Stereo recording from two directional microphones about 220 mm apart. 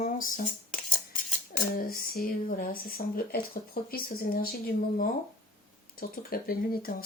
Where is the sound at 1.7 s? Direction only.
40° left (ahead or behind).